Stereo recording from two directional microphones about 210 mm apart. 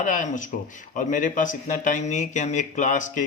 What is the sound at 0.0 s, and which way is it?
Speech, 40° left (ahead or behind).